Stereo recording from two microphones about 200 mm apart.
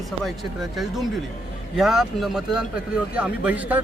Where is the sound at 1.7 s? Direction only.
Centre (ahead or behind).